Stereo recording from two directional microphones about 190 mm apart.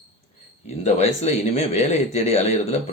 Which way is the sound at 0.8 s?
35° left (ahead or behind).